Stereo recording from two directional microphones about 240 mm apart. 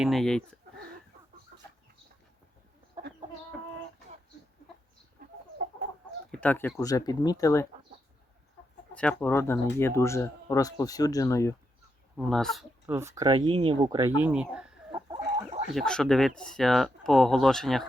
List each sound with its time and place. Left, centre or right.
0.0 s speech: centre
5.2 s chicken: right
6.3 s speech: centre
9.0 s speech: centre
12.1 s speech: centre
12.8 s speech: centre
14.2 s speech: centre
14.9 s chicken: right
15.7 s speech: centre